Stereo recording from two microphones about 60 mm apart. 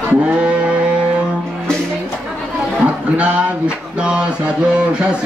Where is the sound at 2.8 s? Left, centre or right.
Centre.